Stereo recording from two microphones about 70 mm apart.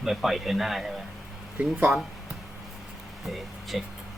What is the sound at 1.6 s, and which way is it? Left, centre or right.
Speech, centre.